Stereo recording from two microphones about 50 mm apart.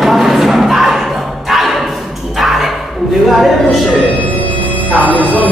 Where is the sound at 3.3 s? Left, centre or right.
Centre.